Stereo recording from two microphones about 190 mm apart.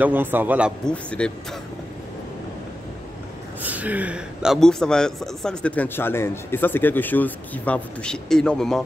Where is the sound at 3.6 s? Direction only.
10° right (ahead or behind).